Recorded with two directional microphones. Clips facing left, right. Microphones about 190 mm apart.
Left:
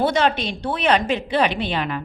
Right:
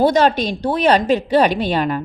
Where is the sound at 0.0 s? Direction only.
40° right (ahead or behind).